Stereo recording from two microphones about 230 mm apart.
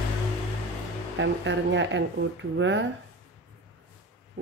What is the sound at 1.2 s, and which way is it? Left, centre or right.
Speech, right.